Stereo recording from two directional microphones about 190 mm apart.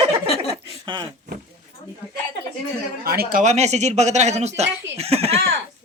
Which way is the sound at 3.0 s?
55° right (ahead or behind).